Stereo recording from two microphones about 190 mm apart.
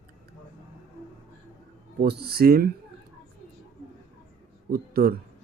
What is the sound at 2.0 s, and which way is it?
Speech, 55° right (ahead or behind).